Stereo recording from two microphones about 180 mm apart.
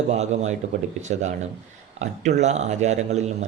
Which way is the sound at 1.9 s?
40° right (ahead or behind).